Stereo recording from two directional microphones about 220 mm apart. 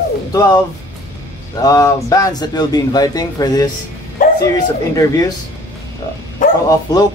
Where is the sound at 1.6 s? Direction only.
15° left (ahead or behind).